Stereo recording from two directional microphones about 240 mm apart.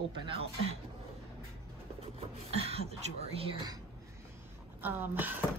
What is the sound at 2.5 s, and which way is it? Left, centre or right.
A woman's voice, right.